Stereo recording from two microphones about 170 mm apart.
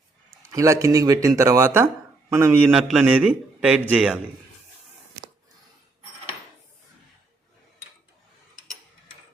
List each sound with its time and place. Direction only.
0.5 s speech: 20° right (ahead or behind)